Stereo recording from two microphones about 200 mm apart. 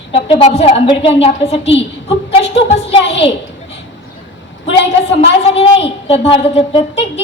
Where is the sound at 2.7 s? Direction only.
30° left (ahead or behind).